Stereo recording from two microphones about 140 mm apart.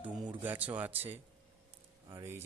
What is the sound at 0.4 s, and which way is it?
Speech, 10° right (ahead or behind).